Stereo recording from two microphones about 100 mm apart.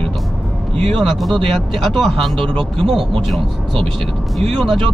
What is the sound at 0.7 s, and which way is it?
Speech, 65° right (ahead or behind).